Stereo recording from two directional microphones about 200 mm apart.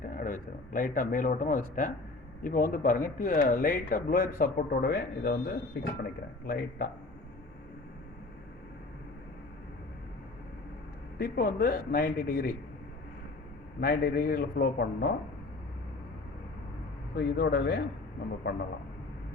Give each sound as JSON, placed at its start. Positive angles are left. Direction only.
{"t": 0.0, "sound": "a man's voice", "side_deg": 45}
{"t": 11.2, "sound": "speech", "side_deg": 45}
{"t": 13.7, "sound": "speech", "side_deg": 45}
{"t": 17.2, "sound": "speech", "side_deg": 55}